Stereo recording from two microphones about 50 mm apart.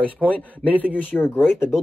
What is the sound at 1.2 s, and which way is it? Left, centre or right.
Speech, left.